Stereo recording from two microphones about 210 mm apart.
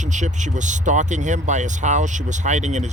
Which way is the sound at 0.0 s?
35° right (ahead or behind).